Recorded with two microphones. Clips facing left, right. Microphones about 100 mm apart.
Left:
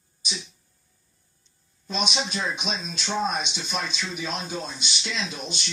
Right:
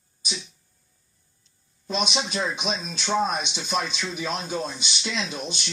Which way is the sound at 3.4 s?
20° right (ahead or behind).